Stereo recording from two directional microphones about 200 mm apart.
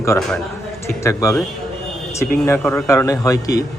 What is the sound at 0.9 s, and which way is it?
Speech, 15° left (ahead or behind).